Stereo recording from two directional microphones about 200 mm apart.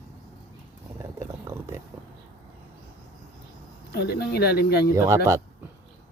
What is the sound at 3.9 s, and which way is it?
Speech, 50° left (ahead or behind).